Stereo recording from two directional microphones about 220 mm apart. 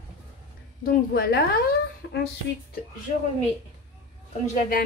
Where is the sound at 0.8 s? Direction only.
40° left (ahead or behind).